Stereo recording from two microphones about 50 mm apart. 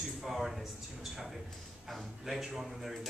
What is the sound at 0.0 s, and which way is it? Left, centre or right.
Speech, centre.